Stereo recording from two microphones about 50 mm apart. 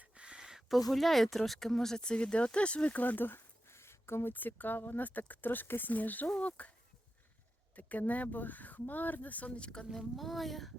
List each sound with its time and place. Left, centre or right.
0.0 s a sound: right
0.7 s speech: centre; by 4.3 s left
4.3 s speech: left
7.8 s speech: left
9.9 s speech: centre